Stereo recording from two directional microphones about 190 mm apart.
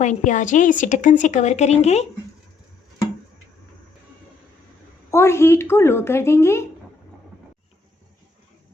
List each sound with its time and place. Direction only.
0.0 s a woman's voice: 40° left (ahead or behind)
5.1 s a woman's voice: 15° left (ahead or behind)